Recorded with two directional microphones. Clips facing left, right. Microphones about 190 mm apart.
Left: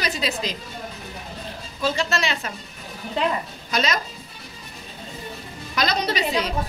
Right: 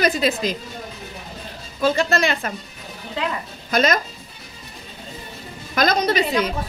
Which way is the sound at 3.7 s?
50° right (ahead or behind).